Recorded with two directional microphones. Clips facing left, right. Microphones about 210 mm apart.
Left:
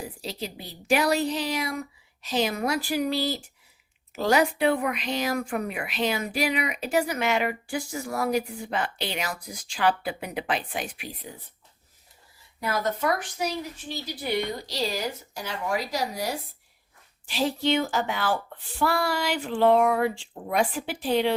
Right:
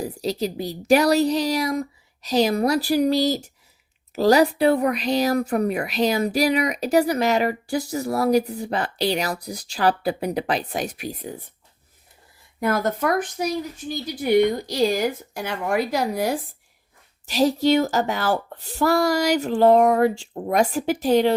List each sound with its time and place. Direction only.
0.0 s speech: 40° right (ahead or behind)
12.5 s speech: 50° right (ahead or behind)
17.2 s speech: 40° right (ahead or behind)